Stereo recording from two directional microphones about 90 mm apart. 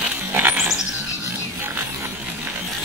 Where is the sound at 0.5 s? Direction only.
5° right (ahead or behind).